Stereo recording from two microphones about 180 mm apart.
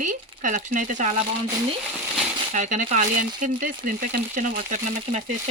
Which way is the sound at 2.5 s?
45° right (ahead or behind).